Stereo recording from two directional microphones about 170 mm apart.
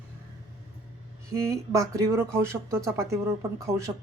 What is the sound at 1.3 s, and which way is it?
Speech, 15° right (ahead or behind).